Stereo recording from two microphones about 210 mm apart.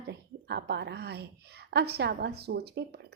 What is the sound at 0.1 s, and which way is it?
A woman's voice, 55° right (ahead or behind).